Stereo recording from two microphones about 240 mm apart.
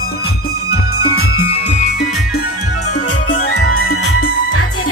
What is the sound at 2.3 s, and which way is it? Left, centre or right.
Music, left.